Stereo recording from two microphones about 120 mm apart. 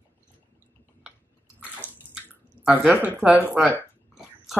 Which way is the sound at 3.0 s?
10° right (ahead or behind).